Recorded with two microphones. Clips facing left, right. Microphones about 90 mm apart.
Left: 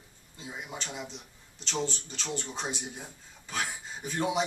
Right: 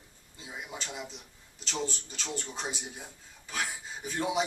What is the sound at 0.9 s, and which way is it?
Speech, 5° right (ahead or behind).